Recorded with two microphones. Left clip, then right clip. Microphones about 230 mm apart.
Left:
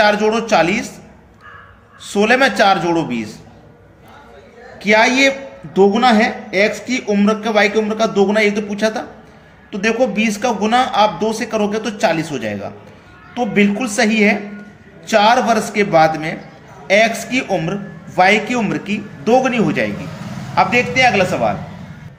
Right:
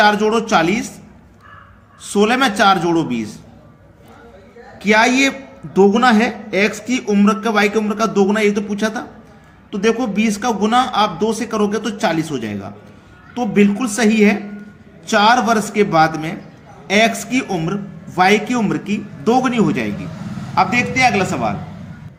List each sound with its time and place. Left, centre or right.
0.0 s a man's voice: right
2.0 s a man's voice: right
4.8 s a man's voice: right